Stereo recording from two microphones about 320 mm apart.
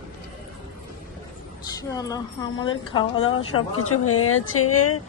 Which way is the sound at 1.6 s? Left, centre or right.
Centre.